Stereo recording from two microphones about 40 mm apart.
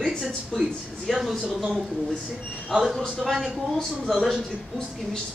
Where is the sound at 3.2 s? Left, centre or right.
Centre.